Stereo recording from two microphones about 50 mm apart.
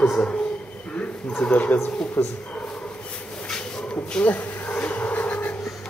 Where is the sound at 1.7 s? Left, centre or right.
Left.